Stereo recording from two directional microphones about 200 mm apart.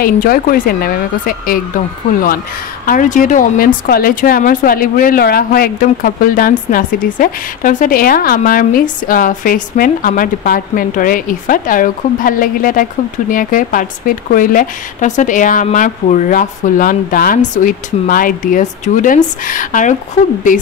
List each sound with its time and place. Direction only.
0.0 s a woman's voice: 45° left (ahead or behind)